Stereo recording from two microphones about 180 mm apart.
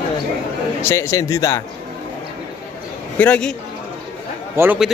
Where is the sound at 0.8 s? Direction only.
15° left (ahead or behind).